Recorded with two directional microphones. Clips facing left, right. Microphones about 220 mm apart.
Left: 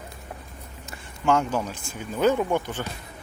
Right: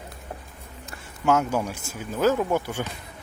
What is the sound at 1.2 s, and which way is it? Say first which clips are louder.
Speech: right 1 dB; 5° right (ahead or behind).